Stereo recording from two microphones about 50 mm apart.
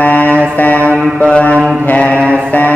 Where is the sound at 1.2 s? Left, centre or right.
Left.